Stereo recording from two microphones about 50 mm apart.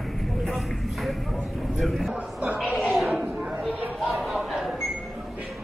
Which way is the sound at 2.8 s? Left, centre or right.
Centre.